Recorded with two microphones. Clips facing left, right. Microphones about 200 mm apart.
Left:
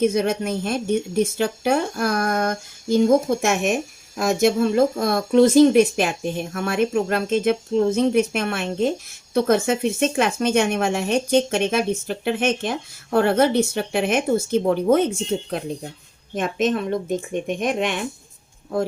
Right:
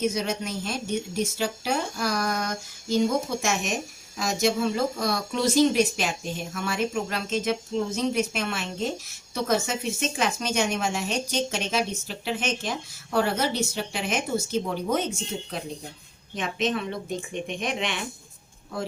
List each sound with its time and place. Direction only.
0.0 s speech: 55° left (ahead or behind)